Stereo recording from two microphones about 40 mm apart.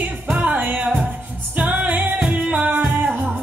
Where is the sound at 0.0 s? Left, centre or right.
Right.